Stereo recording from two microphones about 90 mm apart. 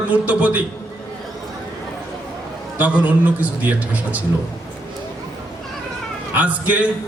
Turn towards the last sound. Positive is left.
turn(degrees=-15)  # may be behind; listen again after turning